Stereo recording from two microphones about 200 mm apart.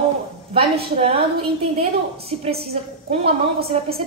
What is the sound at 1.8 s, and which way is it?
A woman's voice, 30° right (ahead or behind).